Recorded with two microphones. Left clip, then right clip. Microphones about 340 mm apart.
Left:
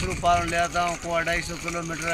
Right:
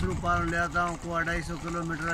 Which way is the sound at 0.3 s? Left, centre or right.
Centre.